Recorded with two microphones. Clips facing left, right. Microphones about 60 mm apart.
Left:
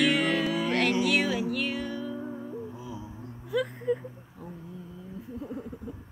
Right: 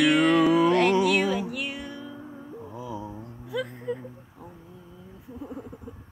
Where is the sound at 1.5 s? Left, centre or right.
Centre.